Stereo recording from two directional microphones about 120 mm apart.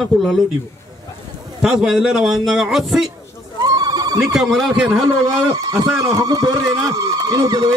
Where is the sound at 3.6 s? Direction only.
35° right (ahead or behind).